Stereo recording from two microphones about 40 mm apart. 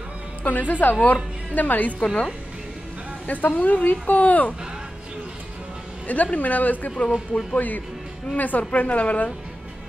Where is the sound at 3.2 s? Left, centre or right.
Left.